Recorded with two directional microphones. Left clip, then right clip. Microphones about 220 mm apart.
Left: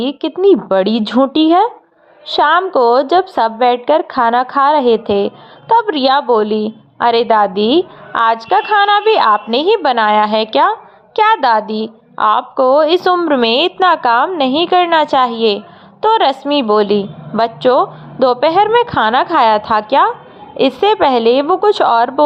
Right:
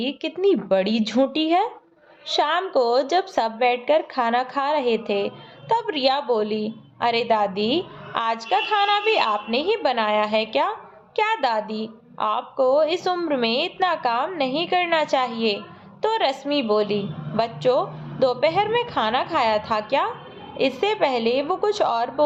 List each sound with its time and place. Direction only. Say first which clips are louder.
0.0 s a woman's voice: left 9 dB; 25° left (ahead or behind)